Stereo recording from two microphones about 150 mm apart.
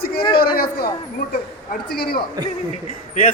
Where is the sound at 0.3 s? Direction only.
90° left.